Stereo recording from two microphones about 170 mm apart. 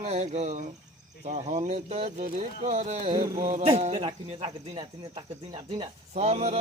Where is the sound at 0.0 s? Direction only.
40° right (ahead or behind).